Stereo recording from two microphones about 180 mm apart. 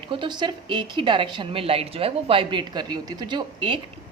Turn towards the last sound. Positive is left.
turn(degrees=-25)  # may be behind; listen again after turning